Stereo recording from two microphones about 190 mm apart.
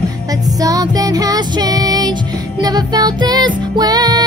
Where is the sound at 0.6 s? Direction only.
20° right (ahead or behind).